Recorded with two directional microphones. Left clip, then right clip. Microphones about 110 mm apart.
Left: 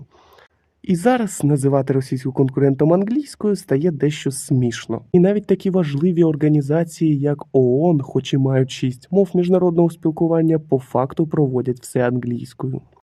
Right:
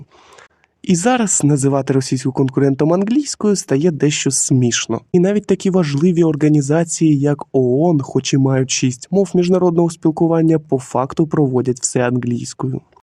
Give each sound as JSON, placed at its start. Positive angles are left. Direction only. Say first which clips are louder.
{"t": 0.9, "sound": "speech", "louder": "right 2 dB", "side_deg": -35}